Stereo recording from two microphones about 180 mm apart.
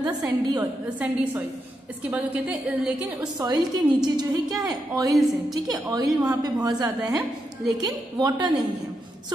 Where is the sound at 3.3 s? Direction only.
20° right (ahead or behind).